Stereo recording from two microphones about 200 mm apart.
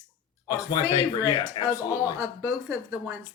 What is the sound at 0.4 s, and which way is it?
Speech, 20° left (ahead or behind).